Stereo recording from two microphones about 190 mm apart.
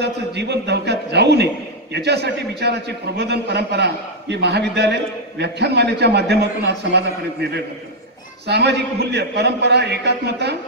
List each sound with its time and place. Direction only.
0.0 s a man's voice: 60° right (ahead or behind)